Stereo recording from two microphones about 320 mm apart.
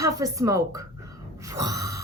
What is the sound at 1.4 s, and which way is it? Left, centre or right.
Gasp, centre.